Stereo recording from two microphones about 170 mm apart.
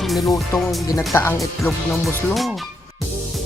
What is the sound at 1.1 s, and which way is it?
Music, 15° left (ahead or behind).